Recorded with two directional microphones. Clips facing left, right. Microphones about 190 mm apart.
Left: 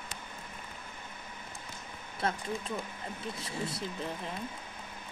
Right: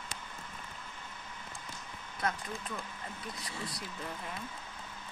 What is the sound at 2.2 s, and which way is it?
A woman's voice, 25° left (ahead or behind).